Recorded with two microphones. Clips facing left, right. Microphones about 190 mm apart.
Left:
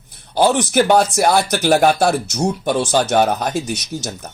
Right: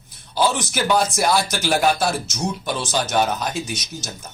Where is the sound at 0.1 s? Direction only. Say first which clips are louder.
Left 5 dB; 55° left (ahead or behind).